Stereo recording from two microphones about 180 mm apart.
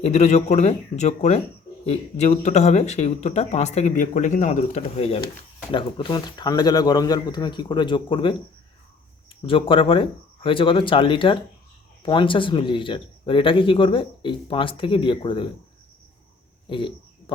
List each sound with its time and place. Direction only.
0.0 s speech: 35° left (ahead or behind)
9.5 s speech: 30° left (ahead or behind)
16.6 s a sound: 30° left (ahead or behind)